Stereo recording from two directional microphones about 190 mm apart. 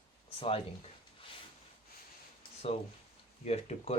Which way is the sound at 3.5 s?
35° left (ahead or behind).